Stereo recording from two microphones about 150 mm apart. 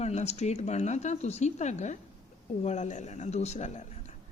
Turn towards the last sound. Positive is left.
turn(degrees=50)  # may be behind; listen again after turning